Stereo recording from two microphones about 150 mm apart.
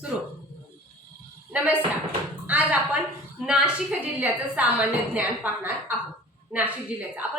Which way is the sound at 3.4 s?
5° right (ahead or behind).